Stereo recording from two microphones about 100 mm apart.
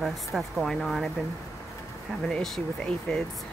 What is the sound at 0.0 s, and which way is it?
Speech, centre (ahead or behind).